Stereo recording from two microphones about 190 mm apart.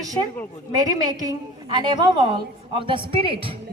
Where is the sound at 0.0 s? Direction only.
20° right (ahead or behind).